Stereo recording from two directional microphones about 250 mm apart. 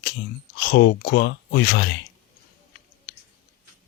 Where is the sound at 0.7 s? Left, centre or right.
Left.